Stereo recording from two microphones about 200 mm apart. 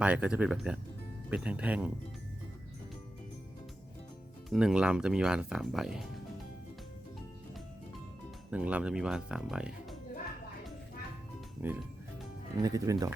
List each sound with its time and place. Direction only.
0.0 s speech: 5° right (ahead or behind)
4.4 s speech: centre (ahead or behind)
8.4 s speech: 5° right (ahead or behind)
11.6 s speech: 10° right (ahead or behind)